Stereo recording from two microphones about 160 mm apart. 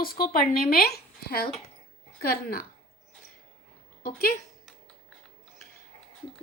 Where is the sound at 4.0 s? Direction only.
60° left (ahead or behind).